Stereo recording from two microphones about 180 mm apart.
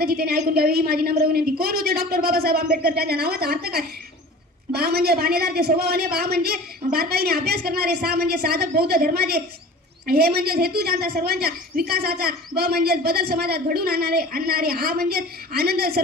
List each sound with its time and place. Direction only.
0.0 s a woman's voice: 55° right (ahead or behind)